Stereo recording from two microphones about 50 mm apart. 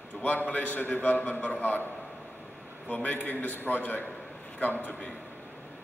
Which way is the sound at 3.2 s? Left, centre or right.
Left.